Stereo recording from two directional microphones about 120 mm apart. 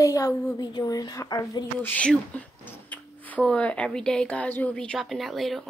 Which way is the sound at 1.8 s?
15° left (ahead or behind).